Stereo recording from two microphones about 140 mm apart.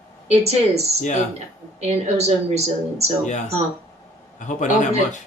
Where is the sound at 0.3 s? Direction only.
50° right (ahead or behind).